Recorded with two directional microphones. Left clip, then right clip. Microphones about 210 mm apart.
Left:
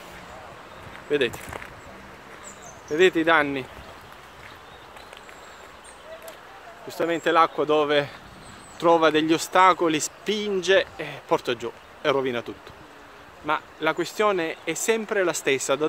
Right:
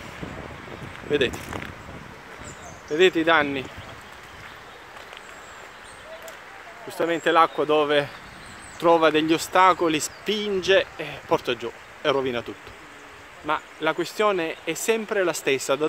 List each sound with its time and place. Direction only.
1.1 s speech: centre (ahead or behind)
2.9 s speech: centre (ahead or behind)
6.9 s speech: centre (ahead or behind)